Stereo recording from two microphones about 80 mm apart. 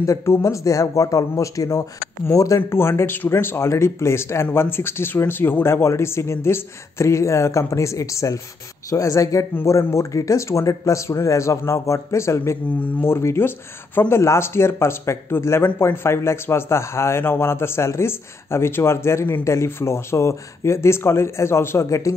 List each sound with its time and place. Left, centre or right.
0.0 s speech: left
12.8 s speech: left